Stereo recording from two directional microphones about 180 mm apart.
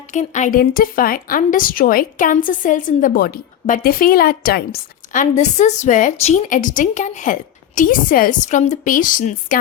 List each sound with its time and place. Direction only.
0.1 s a woman's voice: 40° left (ahead or behind)